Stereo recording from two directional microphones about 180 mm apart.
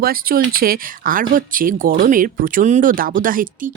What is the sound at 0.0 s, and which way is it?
Speech, 55° right (ahead or behind).